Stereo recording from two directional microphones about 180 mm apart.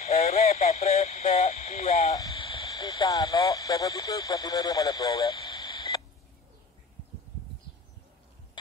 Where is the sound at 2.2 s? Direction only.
25° left (ahead or behind).